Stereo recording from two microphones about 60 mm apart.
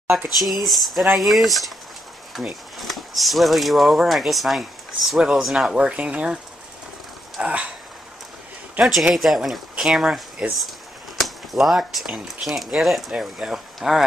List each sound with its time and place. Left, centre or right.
0.1 s speech: centre
5.8 s speech: centre
7.4 s speech: centre
8.8 s speech: centre